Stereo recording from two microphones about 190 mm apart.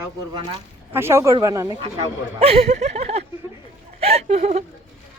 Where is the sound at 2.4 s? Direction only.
30° right (ahead or behind).